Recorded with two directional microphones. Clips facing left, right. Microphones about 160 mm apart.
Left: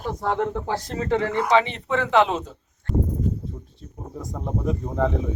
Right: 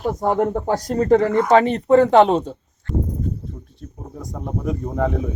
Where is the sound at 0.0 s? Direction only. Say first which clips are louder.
Right 5 dB; 45° right (ahead or behind).